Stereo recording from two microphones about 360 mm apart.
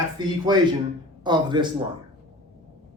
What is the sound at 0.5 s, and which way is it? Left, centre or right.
A man's voice, centre.